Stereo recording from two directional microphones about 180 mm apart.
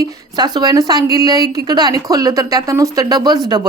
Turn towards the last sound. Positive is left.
turn(degrees=-25)  # may be behind; listen again after turning